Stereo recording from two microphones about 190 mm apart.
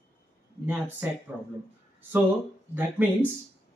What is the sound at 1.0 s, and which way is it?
Speech, 10° right (ahead or behind).